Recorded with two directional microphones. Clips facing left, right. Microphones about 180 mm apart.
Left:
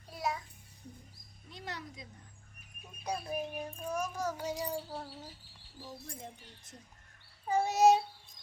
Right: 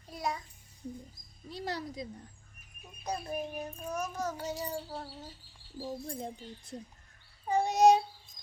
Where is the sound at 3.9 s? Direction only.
10° left (ahead or behind).